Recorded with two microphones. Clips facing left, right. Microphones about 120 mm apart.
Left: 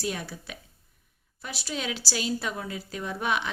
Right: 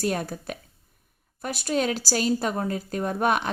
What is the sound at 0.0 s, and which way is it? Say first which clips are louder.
A woman's voice: right 6 dB; 50° right (ahead or behind).